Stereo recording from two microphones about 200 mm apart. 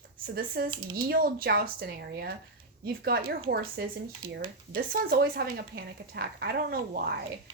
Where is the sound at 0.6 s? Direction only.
50° right (ahead or behind).